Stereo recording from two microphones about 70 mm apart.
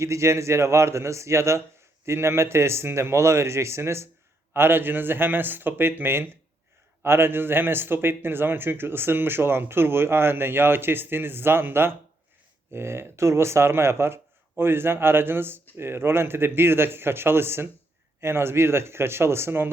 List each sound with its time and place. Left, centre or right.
0.0 s a man's voice: right